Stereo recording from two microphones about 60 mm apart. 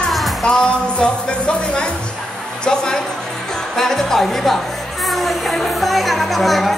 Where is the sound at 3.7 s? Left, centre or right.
Centre.